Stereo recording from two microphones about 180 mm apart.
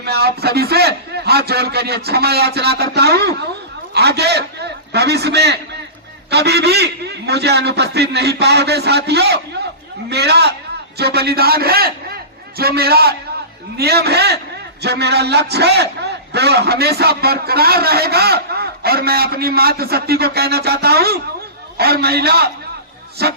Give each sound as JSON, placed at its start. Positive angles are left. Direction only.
{"t": 0.0, "sound": "a man's voice", "side_deg": -60}